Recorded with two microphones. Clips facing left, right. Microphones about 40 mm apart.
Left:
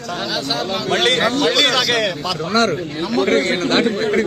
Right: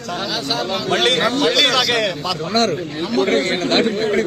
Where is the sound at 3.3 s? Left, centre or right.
Left.